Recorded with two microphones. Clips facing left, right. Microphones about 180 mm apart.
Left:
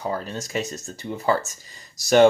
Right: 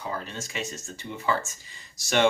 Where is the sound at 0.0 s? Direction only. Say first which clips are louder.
Left 6 dB; 40° left (ahead or behind).